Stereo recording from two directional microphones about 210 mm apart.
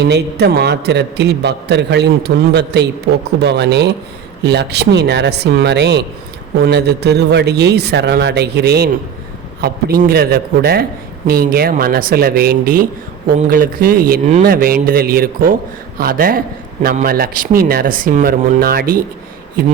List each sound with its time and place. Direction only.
0.0 s a man's voice: 50° right (ahead or behind)